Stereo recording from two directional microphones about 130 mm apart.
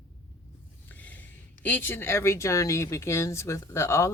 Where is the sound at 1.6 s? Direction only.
15° left (ahead or behind).